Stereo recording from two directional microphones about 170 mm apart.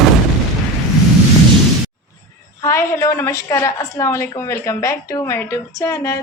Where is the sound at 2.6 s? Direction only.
15° left (ahead or behind).